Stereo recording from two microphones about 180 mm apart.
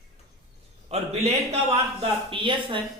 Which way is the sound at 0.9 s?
35° right (ahead or behind).